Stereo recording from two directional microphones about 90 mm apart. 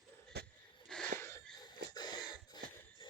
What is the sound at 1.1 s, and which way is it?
Wheeze, 25° left (ahead or behind).